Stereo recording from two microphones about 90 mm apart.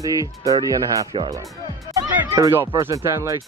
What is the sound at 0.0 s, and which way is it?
Speech, 40° right (ahead or behind).